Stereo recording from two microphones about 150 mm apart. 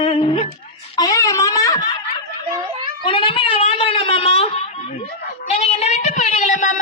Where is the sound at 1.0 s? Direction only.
25° left (ahead or behind).